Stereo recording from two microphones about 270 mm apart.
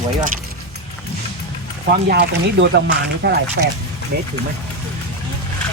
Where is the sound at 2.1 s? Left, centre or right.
Right.